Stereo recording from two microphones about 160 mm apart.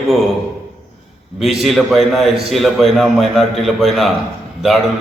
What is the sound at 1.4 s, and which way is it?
A man's voice, centre (ahead or behind).